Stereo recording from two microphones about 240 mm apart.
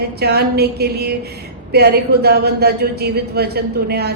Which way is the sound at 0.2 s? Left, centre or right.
Right.